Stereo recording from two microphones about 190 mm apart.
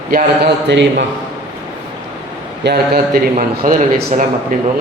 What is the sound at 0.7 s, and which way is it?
Speech, 70° right (ahead or behind).